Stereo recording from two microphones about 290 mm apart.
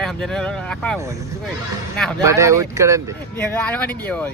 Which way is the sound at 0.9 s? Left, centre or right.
Centre.